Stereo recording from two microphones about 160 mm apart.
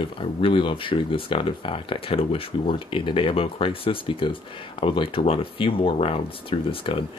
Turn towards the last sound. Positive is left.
turn(degrees=35)  # may be behind; listen again after turning